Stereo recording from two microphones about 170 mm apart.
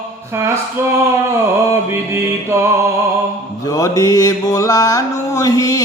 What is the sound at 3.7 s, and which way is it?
Mantra, 20° left (ahead or behind).